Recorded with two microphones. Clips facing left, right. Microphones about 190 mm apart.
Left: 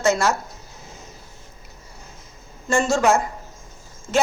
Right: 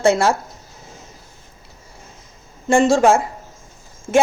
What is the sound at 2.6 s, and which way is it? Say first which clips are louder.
Speech: right 6 dB; 20° right (ahead or behind).